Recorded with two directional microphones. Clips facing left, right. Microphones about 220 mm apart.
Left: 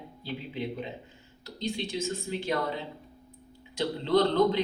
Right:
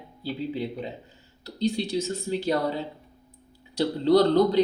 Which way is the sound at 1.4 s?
35° right (ahead or behind).